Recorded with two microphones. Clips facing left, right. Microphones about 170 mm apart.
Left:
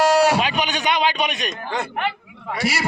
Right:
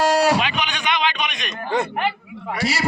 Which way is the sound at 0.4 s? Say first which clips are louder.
Left 2 dB; 40° left (ahead or behind).